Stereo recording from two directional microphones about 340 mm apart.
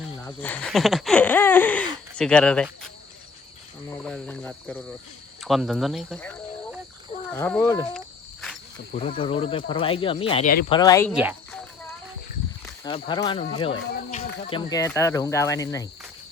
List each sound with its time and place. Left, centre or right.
0.1 s a sound: centre
3.9 s speech: centre
7.3 s wild animals: centre
8.9 s speech: centre
10.7 s speech: centre
11.1 s a sound: centre
12.6 s speech: centre